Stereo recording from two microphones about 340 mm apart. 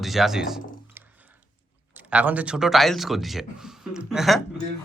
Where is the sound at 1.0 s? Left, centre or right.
Centre.